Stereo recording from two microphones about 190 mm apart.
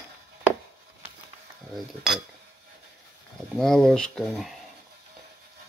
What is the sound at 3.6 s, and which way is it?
Speech, centre (ahead or behind).